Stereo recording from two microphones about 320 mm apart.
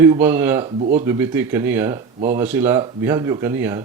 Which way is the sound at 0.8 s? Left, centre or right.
Right.